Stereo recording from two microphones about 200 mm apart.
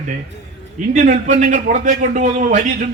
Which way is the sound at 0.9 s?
40° right (ahead or behind).